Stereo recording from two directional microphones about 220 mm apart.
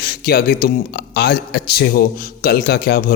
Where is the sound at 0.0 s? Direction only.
45° left (ahead or behind).